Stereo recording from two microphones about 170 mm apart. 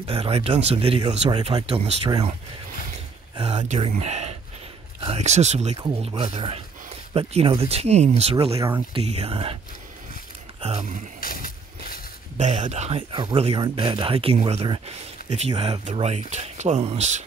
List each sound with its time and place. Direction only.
0.0 s speech: 35° right (ahead or behind)
1.5 s speech: 25° right (ahead or behind)
3.3 s speech: 35° right (ahead or behind)
8.5 s speech: 15° right (ahead or behind)
8.9 s speech: 35° right (ahead or behind)
11.1 s a sound: 55° left (ahead or behind)
12.6 s speech: 40° right (ahead or behind)